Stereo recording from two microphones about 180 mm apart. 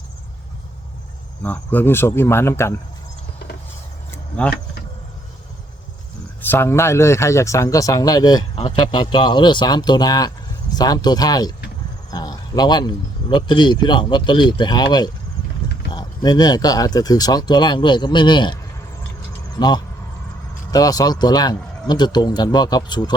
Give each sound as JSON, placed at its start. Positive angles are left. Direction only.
{"t": 1.4, "sound": "speech", "side_deg": 10}
{"t": 4.1, "sound": "a sound", "side_deg": 5}
{"t": 6.4, "sound": "speech", "side_deg": 10}
{"t": 15.9, "sound": "speech", "side_deg": 25}